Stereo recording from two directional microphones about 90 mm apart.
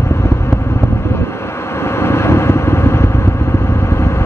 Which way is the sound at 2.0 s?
30° left (ahead or behind).